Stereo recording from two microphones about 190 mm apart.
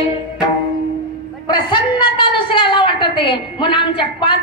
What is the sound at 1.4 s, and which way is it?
A woman's voice, 25° left (ahead or behind).